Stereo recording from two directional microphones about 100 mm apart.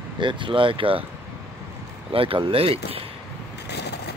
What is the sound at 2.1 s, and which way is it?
Speech, 65° right (ahead or behind).